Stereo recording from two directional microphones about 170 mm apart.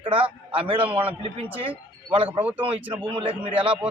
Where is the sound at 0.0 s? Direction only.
30° right (ahead or behind).